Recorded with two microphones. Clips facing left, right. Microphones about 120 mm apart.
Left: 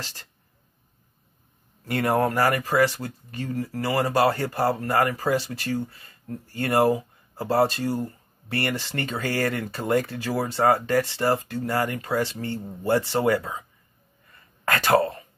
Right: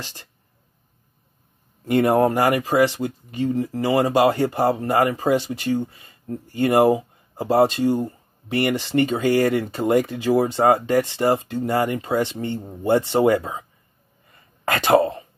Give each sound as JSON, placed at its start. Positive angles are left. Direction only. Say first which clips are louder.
{"t": 0.0, "sound": "speech", "louder": "right 2 dB", "side_deg": -15}
{"t": 1.9, "sound": "speech", "louder": "right 6 dB", "side_deg": -15}